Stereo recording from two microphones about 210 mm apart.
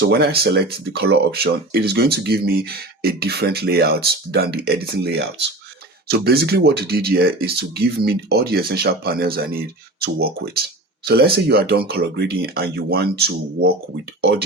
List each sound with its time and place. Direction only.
0.0 s speech: 50° right (ahead or behind)